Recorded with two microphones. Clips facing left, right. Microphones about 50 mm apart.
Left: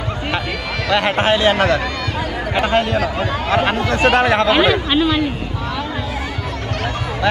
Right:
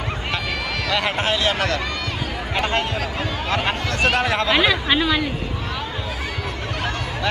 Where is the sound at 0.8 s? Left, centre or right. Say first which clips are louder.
Left 7 dB; left.